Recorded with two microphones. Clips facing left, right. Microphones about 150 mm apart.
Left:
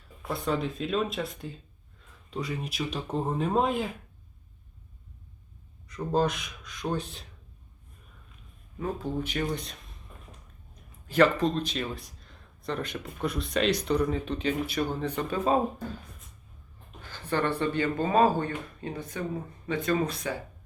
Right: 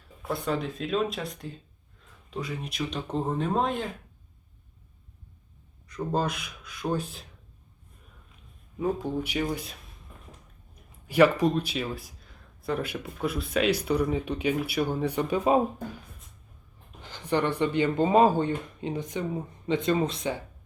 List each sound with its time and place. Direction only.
0.3 s speech: centre (ahead or behind)
5.9 s speech: centre (ahead or behind)
8.8 s speech: 10° right (ahead or behind)
11.0 s speech: 10° right (ahead or behind)
17.0 s speech: 15° right (ahead or behind)